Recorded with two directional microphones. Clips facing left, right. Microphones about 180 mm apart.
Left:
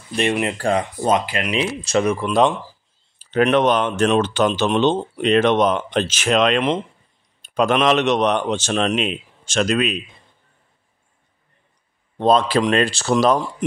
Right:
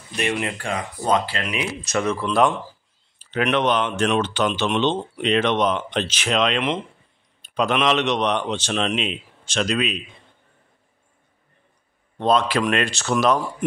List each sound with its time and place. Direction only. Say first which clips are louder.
0.2 s speech: left 4 dB; 25° left (ahead or behind)
0.6 s speech: left 8 dB; 40° left (ahead or behind)
1.0 s speech: right 1 dB; 20° left (ahead or behind)
1.5 s speech: left 7 dB; 30° left (ahead or behind)
2.0 s speech: left 1 dB; 15° left (ahead or behind)
3.2 s a man's voice: left 5 dB; 40° left (ahead or behind)
12.2 s speech: left 3 dB; 30° left (ahead or behind)